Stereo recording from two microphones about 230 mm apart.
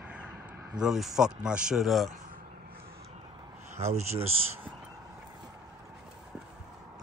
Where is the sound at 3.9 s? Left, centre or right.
Right.